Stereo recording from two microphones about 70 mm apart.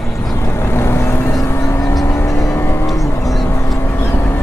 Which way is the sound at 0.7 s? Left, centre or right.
Left.